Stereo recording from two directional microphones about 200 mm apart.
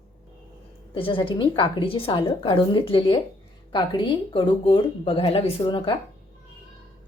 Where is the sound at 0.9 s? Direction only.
25° left (ahead or behind).